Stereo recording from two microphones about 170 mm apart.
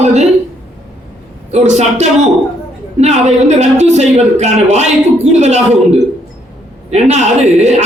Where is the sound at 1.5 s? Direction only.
40° right (ahead or behind).